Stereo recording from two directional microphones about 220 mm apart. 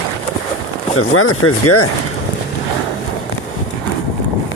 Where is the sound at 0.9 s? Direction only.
75° left (ahead or behind); by 1.9 s 90° left.